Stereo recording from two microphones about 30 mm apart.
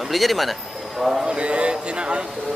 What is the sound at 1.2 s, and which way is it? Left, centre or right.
Speech, right.